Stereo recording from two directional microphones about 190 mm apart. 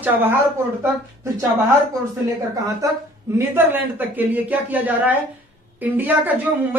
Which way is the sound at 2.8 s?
15° right (ahead or behind).